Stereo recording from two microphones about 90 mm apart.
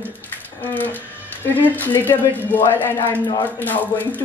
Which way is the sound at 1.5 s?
20° left (ahead or behind).